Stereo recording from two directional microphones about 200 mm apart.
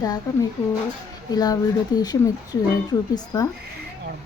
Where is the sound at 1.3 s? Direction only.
20° left (ahead or behind).